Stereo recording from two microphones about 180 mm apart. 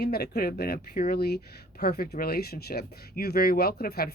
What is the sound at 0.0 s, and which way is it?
Speech, 60° left (ahead or behind).